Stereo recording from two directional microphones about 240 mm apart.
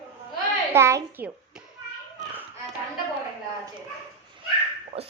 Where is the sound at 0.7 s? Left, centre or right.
Centre.